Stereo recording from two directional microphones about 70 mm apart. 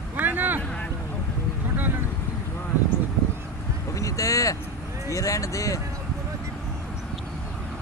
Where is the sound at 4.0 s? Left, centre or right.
Left.